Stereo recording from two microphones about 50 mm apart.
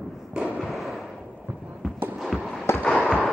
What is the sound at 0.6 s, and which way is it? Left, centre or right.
Fireworks, centre.